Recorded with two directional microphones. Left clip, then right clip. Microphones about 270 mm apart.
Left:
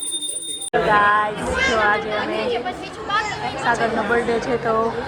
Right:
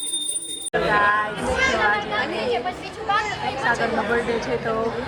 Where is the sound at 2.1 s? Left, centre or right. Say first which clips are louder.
Left 2 dB; centre.